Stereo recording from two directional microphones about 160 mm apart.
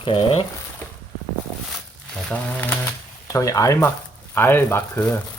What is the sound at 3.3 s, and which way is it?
Speech, 20° left (ahead or behind).